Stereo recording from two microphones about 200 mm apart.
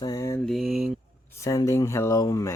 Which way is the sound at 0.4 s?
Centre (ahead or behind).